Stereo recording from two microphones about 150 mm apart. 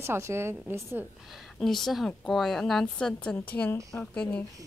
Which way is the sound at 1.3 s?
Centre (ahead or behind).